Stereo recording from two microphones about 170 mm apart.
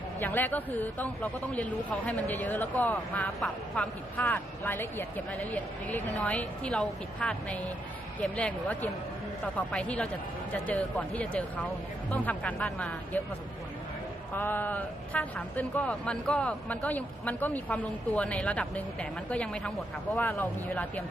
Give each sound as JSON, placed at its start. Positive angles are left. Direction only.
{"t": 0.2, "sound": "a man's voice", "side_deg": 10}
{"t": 14.3, "sound": "a man's voice", "side_deg": 10}